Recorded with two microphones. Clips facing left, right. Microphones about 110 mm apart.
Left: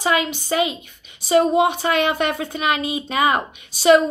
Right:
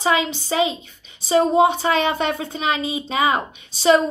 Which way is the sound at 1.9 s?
30° right (ahead or behind).